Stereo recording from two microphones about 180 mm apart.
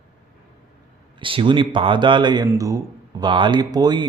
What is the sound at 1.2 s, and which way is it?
Speech, 30° right (ahead or behind).